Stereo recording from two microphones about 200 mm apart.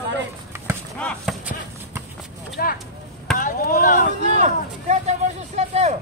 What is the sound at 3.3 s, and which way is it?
Chop, 45° left (ahead or behind).